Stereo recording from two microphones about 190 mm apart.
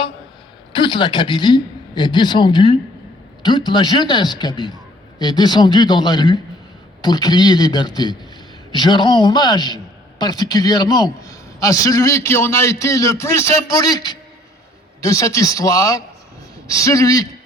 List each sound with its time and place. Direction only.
0.7 s a man's voice: 25° left (ahead or behind)